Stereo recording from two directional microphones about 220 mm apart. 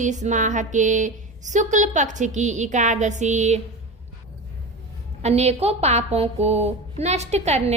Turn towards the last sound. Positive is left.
turn(degrees=-30)  # may be behind; listen again after turning